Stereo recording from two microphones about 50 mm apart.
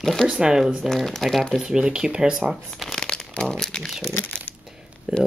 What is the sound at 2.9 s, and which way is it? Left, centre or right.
Crumpling, centre.